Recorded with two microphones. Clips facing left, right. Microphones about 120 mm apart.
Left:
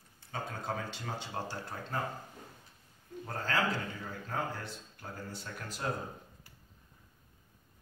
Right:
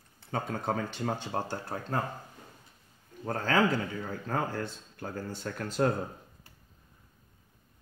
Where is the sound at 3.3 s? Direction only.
55° right (ahead or behind).